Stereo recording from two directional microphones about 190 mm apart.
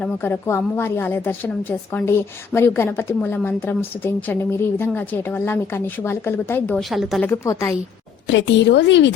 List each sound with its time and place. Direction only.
0.0 s a woman's voice: 10° left (ahead or behind)
6.9 s speech: centre (ahead or behind)
7.3 s a woman's voice: 15° left (ahead or behind)
8.3 s speech: 70° left (ahead or behind)